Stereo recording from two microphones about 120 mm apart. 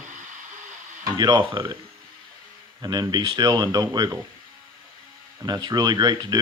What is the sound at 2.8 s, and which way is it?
Speech, 30° right (ahead or behind).